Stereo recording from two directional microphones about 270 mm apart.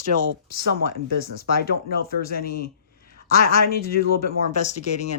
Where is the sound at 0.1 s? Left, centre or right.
Right.